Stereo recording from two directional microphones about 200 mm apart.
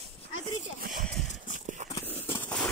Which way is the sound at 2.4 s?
5° left (ahead or behind).